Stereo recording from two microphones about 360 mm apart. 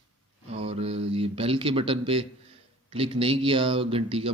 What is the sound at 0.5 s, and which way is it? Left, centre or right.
Speech, centre.